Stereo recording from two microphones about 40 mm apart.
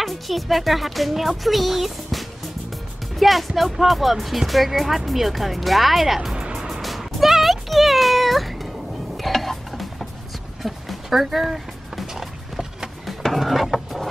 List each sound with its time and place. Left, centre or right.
0.0 s speech: centre
6.3 s music: centre
6.8 s music: centre
13.0 s a sound: centre